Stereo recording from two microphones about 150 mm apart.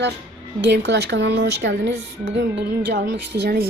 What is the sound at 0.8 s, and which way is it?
A woman's voice, 90° right.